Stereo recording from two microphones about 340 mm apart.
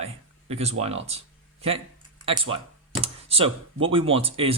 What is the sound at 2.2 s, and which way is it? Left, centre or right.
Speech, centre.